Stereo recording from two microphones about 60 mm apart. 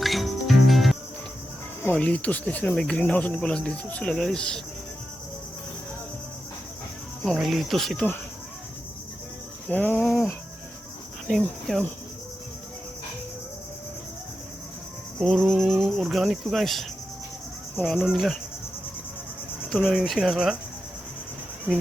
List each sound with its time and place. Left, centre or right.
0.0 s cricket: centre
2.0 s speech: centre
7.4 s speech: centre
9.6 s cricket: left
10.0 s a sound: centre
11.3 s speech: centre
15.2 s speech: centre
19.8 s speech: centre